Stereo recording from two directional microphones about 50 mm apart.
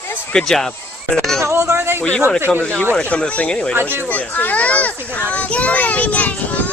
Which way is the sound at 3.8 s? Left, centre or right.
Right.